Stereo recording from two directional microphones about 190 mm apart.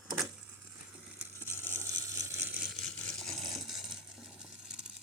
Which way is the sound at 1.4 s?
15° right (ahead or behind).